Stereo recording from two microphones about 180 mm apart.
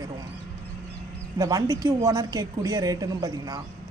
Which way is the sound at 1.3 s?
20° right (ahead or behind).